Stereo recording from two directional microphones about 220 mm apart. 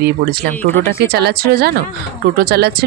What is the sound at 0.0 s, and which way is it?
Speech, 45° right (ahead or behind).